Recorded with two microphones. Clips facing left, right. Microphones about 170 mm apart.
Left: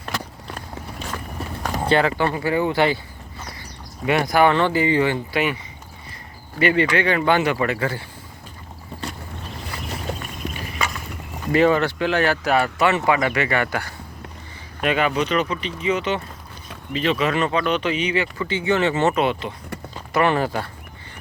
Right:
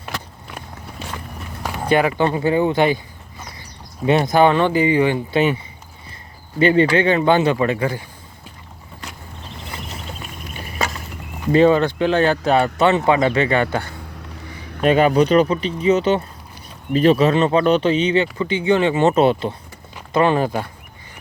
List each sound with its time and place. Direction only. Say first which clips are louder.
1.4 s a sound: left 4 dB; 35° left (ahead or behind)
1.9 s speech: right 3 dB; 15° right (ahead or behind)
4.0 s speech: right 3 dB; 25° right (ahead or behind)
6.6 s speech: right 4 dB; 30° right (ahead or behind)
11.5 s speech: right 4 dB; 20° right (ahead or behind)
14.8 s speech: right 7 dB; 35° right (ahead or behind)
16.9 s speech: right 7 dB; 40° right (ahead or behind); by 19.1 s 15° right (ahead or behind)
19.1 s speech: right 6 dB; 35° right (ahead or behind)
20.1 s speech: right 3 dB; 20° right (ahead or behind)